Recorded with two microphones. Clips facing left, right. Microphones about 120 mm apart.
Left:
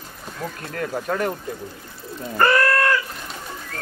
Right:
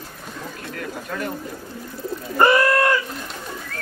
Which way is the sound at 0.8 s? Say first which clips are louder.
Left 6 dB; 50° left (ahead or behind).